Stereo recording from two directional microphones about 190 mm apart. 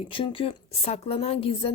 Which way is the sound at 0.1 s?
25° left (ahead or behind).